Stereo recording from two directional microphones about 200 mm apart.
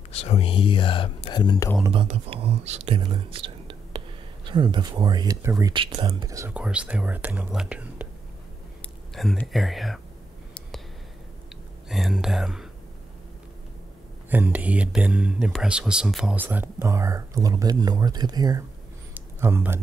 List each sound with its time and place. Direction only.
0.1 s speech: 30° left (ahead or behind)
1.8 s speech: 25° right (ahead or behind); by 8.1 s 5° right (ahead or behind)
9.1 s speech: centre (ahead or behind)
11.9 s speech: centre (ahead or behind)
14.3 s speech: 10° right (ahead or behind)
19.1 s a sound: 10° right (ahead or behind)